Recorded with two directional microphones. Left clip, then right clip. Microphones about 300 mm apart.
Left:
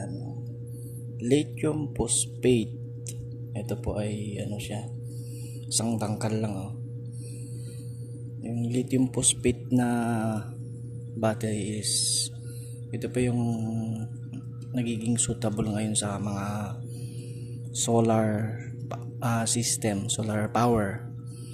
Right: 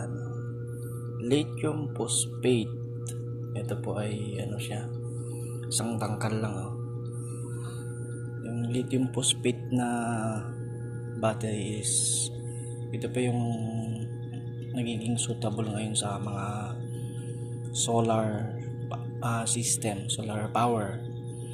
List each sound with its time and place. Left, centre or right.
1.2 s speech: centre
8.6 s speech: left
11.8 s music: left
12.9 s speech: centre
17.9 s speech: left
18.9 s music: left
19.8 s speech: left